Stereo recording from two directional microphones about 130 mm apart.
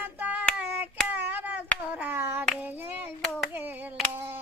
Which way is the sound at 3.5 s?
15° right (ahead or behind).